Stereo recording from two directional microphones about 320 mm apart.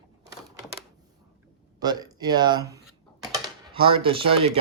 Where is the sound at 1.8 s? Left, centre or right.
Centre.